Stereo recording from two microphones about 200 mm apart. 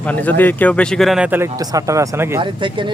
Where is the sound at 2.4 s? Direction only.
25° right (ahead or behind).